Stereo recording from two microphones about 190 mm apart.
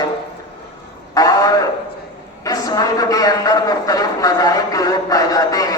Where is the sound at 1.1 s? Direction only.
20° left (ahead or behind).